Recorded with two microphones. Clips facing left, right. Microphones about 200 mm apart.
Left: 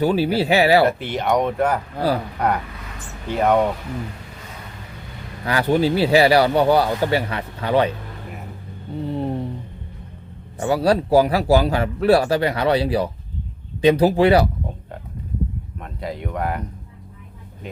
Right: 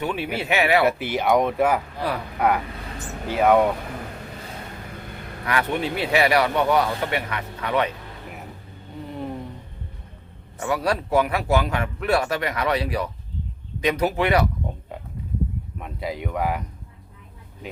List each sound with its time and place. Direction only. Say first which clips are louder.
0.0 s speech: left 8 dB; 35° left (ahead or behind)
0.9 s speech: even; 5° right (ahead or behind)
3.2 s speech: even; 5° right (ahead or behind)
5.5 s speech: left 6 dB; 30° left (ahead or behind)
9.0 s a sound: left 7 dB; 30° left (ahead or behind)
10.6 s speech: left 6 dB; 30° left (ahead or behind)
15.8 s speech: even; 5° right (ahead or behind)